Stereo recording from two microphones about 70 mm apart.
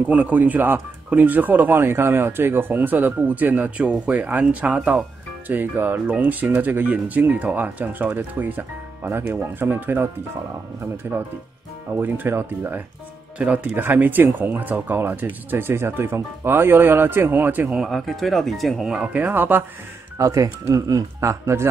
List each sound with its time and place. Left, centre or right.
0.0 s speech: right
13.4 s speech: right
17.8 s speech: centre
18.9 s speech: right
20.2 s speech: right